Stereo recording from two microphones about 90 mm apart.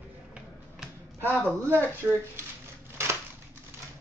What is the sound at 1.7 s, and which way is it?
Speech, 30° right (ahead or behind).